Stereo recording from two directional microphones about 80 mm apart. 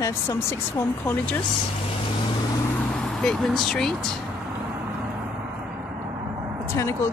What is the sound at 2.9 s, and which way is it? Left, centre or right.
Speech, centre.